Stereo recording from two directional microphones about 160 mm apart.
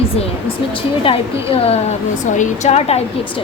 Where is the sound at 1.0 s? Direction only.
35° left (ahead or behind).